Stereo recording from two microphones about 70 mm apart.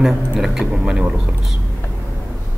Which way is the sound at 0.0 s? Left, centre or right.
Centre.